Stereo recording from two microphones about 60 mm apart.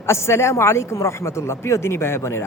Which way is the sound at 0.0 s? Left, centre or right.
Left.